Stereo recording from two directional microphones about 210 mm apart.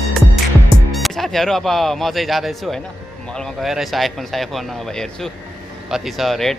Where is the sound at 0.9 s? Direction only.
Centre (ahead or behind).